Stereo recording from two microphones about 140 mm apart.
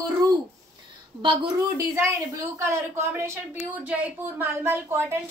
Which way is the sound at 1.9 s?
20° right (ahead or behind).